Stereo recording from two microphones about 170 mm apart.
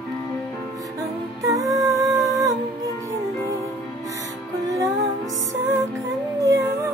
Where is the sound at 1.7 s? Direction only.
20° right (ahead or behind).